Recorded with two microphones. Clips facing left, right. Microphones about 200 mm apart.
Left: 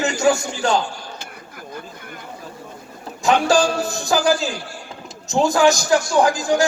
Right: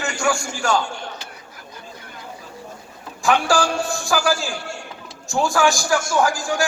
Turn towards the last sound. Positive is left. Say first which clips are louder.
# left 4 dB
turn(degrees=20)  # may be behind; listen again after turning